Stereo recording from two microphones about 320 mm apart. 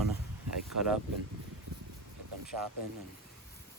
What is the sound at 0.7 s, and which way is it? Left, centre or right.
Speech, right.